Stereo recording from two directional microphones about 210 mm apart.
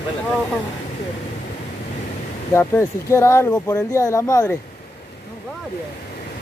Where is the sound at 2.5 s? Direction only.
10° left (ahead or behind).